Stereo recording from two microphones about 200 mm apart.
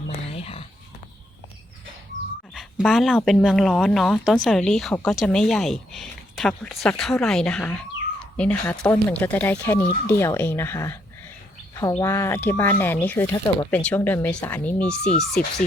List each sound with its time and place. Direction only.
0.1 s whispering: 30° left (ahead or behind)
2.6 s speech: centre (ahead or behind)
15.3 s speech: 55° left (ahead or behind)